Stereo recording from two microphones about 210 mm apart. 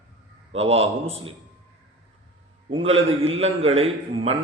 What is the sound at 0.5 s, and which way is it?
Speech, 30° right (ahead or behind).